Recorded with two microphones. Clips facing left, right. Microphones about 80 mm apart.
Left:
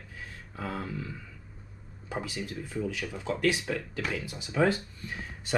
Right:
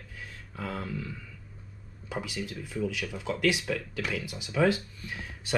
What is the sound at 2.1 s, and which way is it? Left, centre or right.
Speech, left.